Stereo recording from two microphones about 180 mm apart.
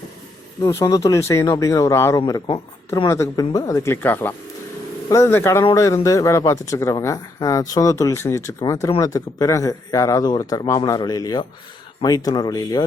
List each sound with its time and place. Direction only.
0.6 s speech: 15° left (ahead or behind)